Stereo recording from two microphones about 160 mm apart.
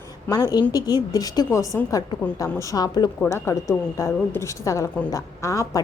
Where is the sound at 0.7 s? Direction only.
25° left (ahead or behind).